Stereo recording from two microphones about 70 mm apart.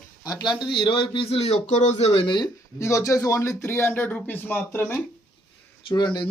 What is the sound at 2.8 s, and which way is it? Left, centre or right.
A man's voice, left.